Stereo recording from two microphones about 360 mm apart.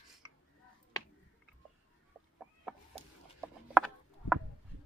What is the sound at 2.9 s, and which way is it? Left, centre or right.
Chicken, centre.